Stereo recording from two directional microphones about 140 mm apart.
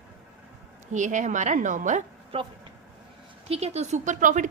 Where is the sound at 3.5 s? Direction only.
50° right (ahead or behind); by 4.4 s 65° right (ahead or behind).